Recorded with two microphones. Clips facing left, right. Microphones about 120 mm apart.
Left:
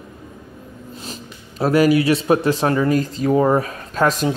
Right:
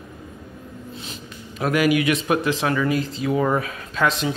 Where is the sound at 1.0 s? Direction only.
35° left (ahead or behind).